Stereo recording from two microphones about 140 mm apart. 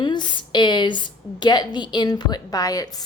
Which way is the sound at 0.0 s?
35° left (ahead or behind).